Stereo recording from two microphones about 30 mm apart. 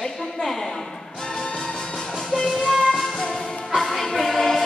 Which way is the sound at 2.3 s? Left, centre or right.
Centre.